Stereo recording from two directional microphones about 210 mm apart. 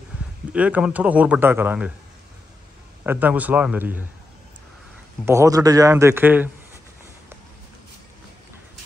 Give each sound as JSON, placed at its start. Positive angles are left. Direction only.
{"t": 0.5, "sound": "a man's voice", "side_deg": -5}
{"t": 3.0, "sound": "a man's voice", "side_deg": -10}
{"t": 5.2, "sound": "a man's voice", "side_deg": -15}